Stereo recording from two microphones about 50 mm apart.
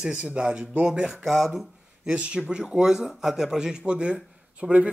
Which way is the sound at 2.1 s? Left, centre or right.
Right.